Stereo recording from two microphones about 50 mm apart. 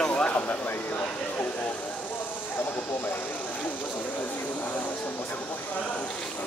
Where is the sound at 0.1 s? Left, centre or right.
Left.